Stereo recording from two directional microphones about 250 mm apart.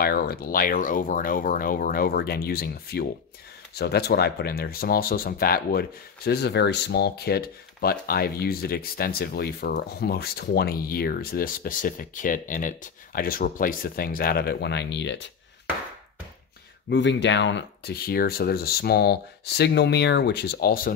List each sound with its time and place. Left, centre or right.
0.0 s speech: left
16.9 s speech: left